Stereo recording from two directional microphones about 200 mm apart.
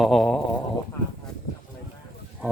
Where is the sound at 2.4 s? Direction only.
10° right (ahead or behind).